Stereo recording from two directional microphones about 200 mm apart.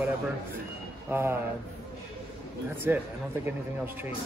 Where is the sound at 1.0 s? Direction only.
10° right (ahead or behind).